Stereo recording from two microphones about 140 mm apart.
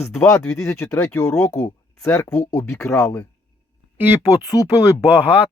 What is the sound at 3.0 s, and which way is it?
Speech, 10° left (ahead or behind).